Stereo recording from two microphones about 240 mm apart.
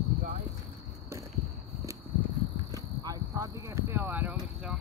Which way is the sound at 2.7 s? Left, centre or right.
Centre.